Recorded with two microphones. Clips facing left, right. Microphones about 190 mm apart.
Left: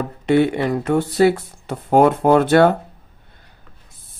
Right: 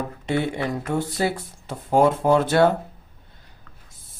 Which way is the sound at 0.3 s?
65° left (ahead or behind).